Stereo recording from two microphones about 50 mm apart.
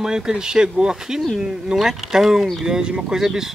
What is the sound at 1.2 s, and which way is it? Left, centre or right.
Speech, centre.